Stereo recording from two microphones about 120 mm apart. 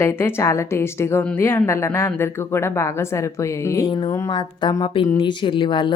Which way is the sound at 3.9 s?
35° left (ahead or behind).